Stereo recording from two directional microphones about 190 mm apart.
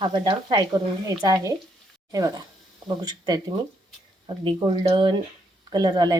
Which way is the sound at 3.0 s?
20° right (ahead or behind).